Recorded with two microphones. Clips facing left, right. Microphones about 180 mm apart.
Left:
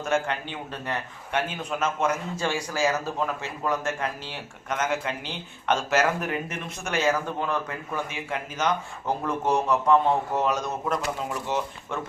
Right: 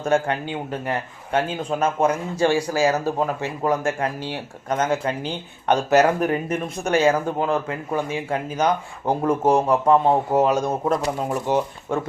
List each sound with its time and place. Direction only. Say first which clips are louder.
0.0 s speech: right 5 dB; 35° right (ahead or behind)
7.9 s speech: right 7 dB; 35° right (ahead or behind)